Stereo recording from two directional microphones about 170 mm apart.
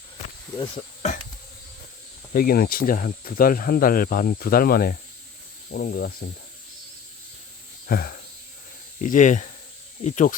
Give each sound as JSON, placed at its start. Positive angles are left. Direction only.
{"t": 2.3, "sound": "speech", "side_deg": 60}
{"t": 7.9, "sound": "speech", "side_deg": 55}